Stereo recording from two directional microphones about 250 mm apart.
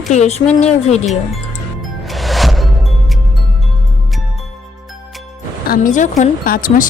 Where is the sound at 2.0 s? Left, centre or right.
Centre.